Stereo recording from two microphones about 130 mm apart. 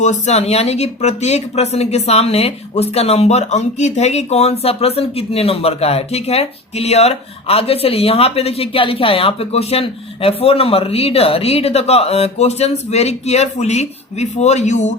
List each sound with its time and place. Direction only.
0.0 s speech: 60° left (ahead or behind)